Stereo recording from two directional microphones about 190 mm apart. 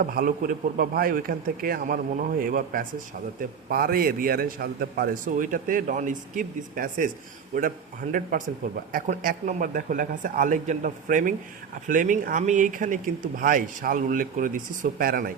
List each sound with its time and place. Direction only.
0.0 s speech: 50° right (ahead or behind)